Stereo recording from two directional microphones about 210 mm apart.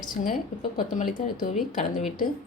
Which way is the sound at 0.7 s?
40° left (ahead or behind).